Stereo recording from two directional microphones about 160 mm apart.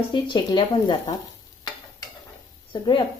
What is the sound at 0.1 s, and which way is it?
Speech, 30° left (ahead or behind).